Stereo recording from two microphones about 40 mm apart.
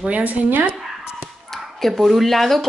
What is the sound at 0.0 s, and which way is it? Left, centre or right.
Speech, right.